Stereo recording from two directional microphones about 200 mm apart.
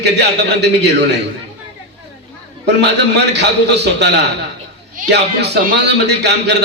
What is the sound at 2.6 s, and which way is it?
A man's voice, 60° right (ahead or behind).